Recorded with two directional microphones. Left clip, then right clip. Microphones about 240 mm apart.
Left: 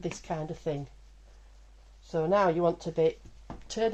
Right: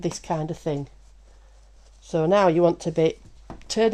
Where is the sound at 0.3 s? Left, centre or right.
Right.